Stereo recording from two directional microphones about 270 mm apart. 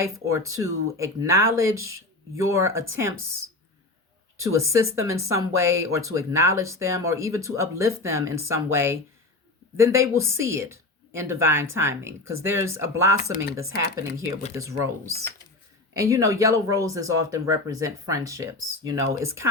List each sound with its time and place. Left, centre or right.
0.0 s speech: centre
4.4 s speech: centre
14.5 s speech: centre